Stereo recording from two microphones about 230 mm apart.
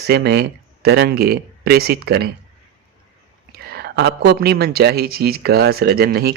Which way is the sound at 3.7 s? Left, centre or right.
Right.